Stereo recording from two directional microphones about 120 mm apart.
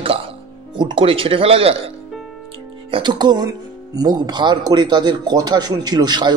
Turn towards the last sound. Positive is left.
turn(degrees=-35)  # may be behind; listen again after turning